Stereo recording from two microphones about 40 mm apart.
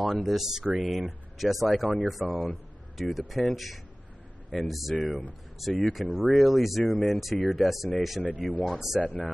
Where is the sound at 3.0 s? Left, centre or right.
Centre.